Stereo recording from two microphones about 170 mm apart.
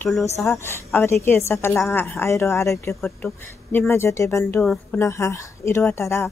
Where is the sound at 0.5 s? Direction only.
15° left (ahead or behind).